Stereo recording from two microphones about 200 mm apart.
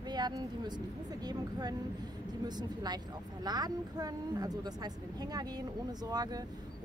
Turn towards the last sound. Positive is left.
turn(degrees=-20)  # may be behind; listen again after turning